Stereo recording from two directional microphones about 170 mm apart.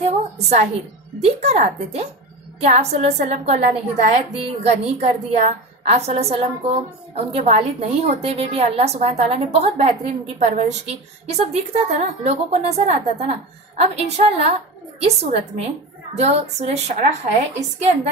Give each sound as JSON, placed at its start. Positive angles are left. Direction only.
{"t": 0.0, "sound": "a woman's voice", "side_deg": -40}